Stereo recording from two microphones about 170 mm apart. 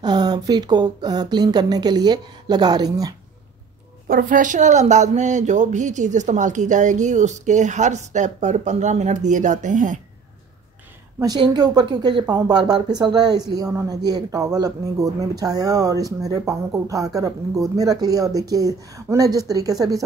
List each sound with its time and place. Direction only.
0.0 s speech: 25° right (ahead or behind)
4.1 s speech: 55° right (ahead or behind)
11.1 s speech: 25° right (ahead or behind)